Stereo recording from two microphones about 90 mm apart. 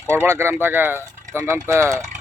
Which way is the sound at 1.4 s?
35° right (ahead or behind).